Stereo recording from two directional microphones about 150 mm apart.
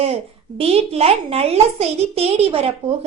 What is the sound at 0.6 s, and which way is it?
A woman's voice, 40° right (ahead or behind).